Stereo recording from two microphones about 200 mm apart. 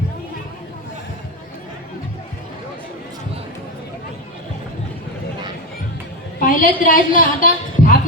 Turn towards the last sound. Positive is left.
turn(degrees=45)  # may be behind; listen again after turning